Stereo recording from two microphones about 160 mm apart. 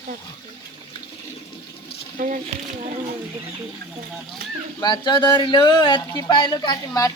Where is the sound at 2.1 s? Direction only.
50° right (ahead or behind).